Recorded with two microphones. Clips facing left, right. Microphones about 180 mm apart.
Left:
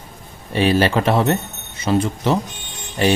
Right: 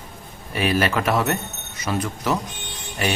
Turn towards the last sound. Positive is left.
turn(degrees=30)  # may be behind; listen again after turning